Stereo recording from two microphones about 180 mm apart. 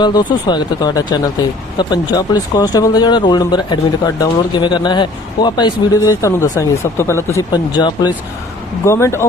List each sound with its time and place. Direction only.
0.0 s speech: 25° left (ahead or behind)